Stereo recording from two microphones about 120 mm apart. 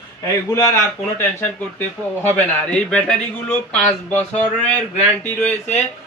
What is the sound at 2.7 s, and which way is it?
Speech, 10° left (ahead or behind).